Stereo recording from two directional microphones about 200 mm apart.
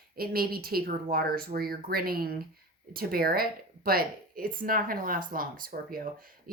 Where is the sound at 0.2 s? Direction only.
50° right (ahead or behind).